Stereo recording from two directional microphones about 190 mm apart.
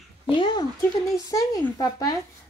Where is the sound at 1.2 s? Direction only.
20° left (ahead or behind).